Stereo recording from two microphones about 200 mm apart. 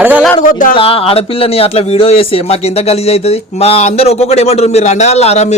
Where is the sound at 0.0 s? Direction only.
10° right (ahead or behind).